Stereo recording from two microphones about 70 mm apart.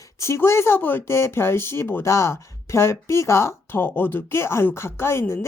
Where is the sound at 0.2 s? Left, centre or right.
Left.